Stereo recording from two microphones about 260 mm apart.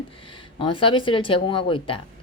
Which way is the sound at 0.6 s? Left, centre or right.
Centre.